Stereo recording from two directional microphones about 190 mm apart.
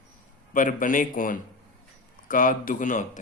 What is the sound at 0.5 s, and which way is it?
Speech, 45° left (ahead or behind).